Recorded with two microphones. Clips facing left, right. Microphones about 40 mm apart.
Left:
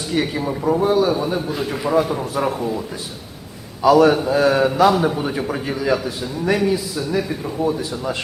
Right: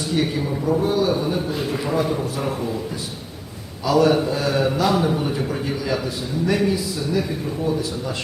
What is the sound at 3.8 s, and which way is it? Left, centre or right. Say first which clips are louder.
Speech: left 4 dB; left.